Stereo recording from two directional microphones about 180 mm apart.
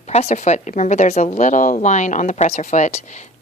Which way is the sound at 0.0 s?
40° left (ahead or behind).